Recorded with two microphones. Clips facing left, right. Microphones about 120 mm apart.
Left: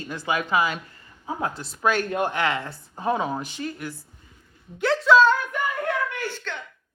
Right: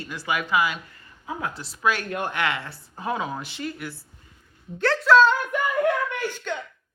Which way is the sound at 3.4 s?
45° left (ahead or behind).